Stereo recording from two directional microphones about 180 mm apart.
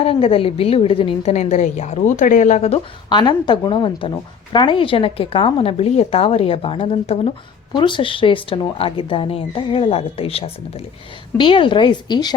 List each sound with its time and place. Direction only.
0.0 s a woman's voice: 30° left (ahead or behind)